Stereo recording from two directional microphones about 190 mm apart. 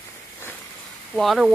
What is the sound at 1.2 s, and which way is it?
Speech, centre (ahead or behind).